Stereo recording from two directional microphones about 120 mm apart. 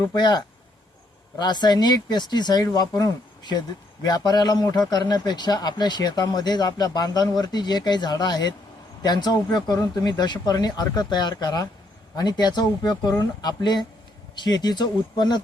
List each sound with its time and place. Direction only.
0.0 s a man's voice: 35° left (ahead or behind)